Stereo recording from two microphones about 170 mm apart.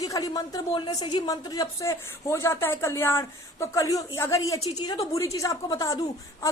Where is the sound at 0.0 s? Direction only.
20° left (ahead or behind).